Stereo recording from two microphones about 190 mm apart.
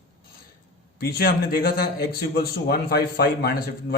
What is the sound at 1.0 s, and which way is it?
A man's voice, 55° left (ahead or behind).